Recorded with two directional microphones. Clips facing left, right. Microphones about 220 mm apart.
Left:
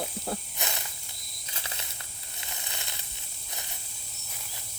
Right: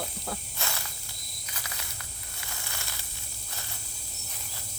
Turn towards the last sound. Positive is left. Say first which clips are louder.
# even
turn(degrees=20)  # may be behind; listen again after turning